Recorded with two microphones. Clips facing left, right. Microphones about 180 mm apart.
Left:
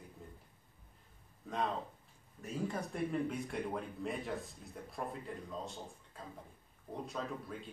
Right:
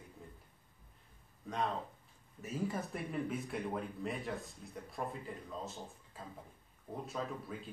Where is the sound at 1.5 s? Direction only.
Centre (ahead or behind).